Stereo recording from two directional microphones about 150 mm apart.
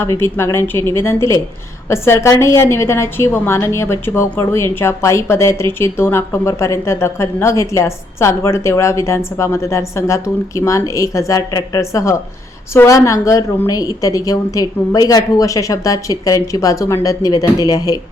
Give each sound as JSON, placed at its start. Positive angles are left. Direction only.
{"t": 0.0, "sound": "a woman's voice", "side_deg": 15}